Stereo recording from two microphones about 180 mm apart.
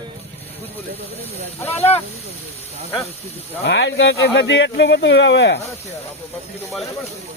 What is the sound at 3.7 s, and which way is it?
Speech, 90° left.